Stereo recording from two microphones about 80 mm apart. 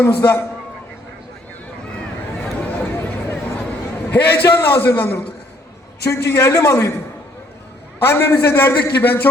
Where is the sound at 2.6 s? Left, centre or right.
Left.